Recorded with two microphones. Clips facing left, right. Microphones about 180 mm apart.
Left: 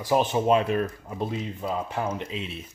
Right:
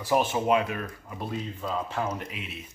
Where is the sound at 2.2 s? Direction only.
30° left (ahead or behind).